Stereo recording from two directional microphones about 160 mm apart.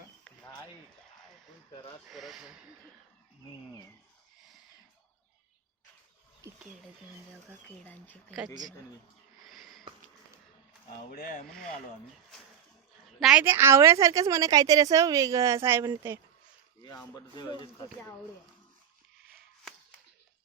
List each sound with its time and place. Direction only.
1.7 s a sound: 30° left (ahead or behind)
2.0 s speech: centre (ahead or behind)
9.4 s sniff: centre (ahead or behind)
11.1 s speech: 65° left (ahead or behind)
13.1 s a woman's voice: 5° right (ahead or behind)
17.3 s speech: 30° left (ahead or behind)